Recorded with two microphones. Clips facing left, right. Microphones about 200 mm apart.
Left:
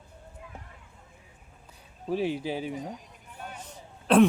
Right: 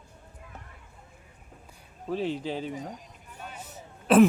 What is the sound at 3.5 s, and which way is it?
Throat clearing, 5° right (ahead or behind).